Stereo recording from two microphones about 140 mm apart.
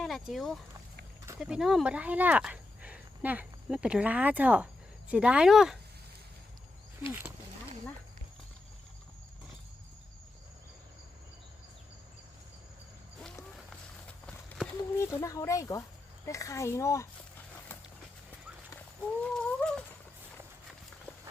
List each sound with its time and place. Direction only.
0.0 s speech: centre (ahead or behind)
7.0 s speech: 15° right (ahead or behind)
14.9 s speech: 20° left (ahead or behind)
16.2 s a sound: 20° left (ahead or behind)
19.2 s fowl: 5° left (ahead or behind)